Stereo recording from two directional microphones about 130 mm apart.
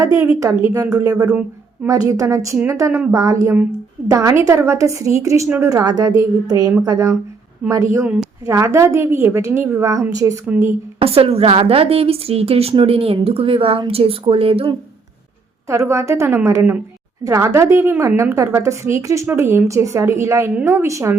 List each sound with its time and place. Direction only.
0.0 s a woman's voice: 25° right (ahead or behind)
1.3 s a sound: 10° right (ahead or behind)
1.9 s a woman's voice: 25° right (ahead or behind)
7.6 s a woman's voice: 10° right (ahead or behind)
8.4 s a woman's voice: 25° right (ahead or behind)
10.4 s a woman's voice: 15° right (ahead or behind)
11.0 s a woman's voice: 50° right (ahead or behind)
15.6 s a woman's voice: 20° right (ahead or behind)